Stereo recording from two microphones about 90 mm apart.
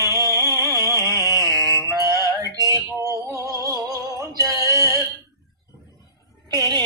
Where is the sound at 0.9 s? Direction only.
35° right (ahead or behind).